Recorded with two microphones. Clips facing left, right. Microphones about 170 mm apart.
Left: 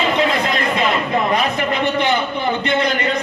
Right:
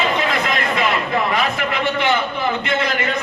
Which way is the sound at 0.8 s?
35° left (ahead or behind).